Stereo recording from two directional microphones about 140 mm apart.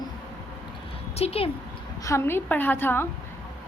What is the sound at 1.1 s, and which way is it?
Speech, 45° left (ahead or behind).